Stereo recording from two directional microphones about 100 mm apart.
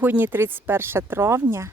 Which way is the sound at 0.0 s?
20° right (ahead or behind).